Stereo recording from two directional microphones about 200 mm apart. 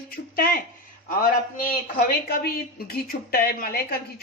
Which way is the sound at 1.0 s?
45° left (ahead or behind).